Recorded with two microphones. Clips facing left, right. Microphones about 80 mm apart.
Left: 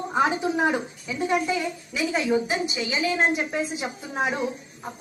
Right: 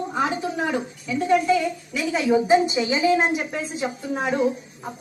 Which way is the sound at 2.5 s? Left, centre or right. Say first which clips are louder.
Right 9 dB; right.